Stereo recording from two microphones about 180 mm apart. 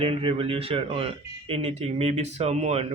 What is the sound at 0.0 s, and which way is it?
Speech, 30° right (ahead or behind).